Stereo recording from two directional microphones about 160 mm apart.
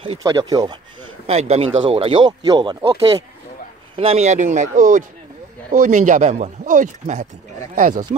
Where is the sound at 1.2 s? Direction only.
40° right (ahead or behind).